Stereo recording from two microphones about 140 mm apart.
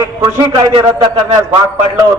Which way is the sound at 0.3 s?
40° right (ahead or behind).